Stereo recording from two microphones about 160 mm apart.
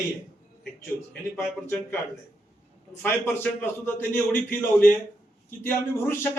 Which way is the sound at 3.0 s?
15° left (ahead or behind).